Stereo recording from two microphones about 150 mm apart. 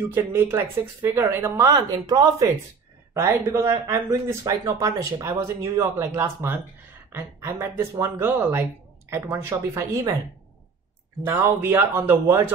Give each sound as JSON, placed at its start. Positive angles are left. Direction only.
{"t": 0.1, "sound": "speech", "side_deg": -15}
{"t": 11.2, "sound": "speech", "side_deg": -15}